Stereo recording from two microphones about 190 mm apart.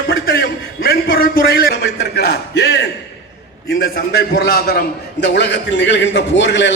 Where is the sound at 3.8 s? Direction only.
55° left (ahead or behind).